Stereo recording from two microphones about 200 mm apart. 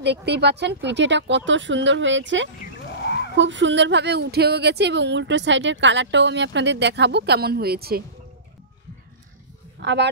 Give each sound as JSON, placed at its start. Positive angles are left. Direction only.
{"t": 0.0, "sound": "speech", "side_deg": -60}
{"t": 3.0, "sound": "a sound", "side_deg": 60}
{"t": 3.3, "sound": "speech", "side_deg": -65}
{"t": 9.8, "sound": "speech", "side_deg": -60}